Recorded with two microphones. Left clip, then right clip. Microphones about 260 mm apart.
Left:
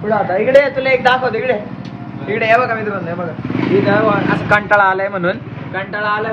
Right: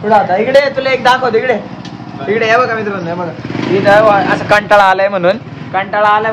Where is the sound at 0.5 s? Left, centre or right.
Right.